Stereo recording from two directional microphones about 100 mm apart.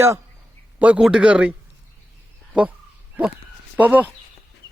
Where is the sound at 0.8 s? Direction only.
15° right (ahead or behind).